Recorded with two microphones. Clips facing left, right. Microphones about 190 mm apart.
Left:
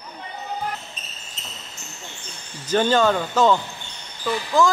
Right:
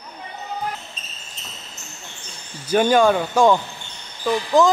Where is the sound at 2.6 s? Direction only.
10° right (ahead or behind).